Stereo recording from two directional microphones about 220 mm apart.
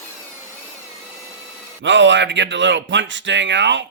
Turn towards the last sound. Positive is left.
turn(degrees=-55)  # may be behind; listen again after turning